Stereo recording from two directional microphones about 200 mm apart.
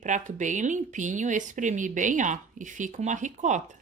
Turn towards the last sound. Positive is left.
turn(degrees=-40)  # may be behind; listen again after turning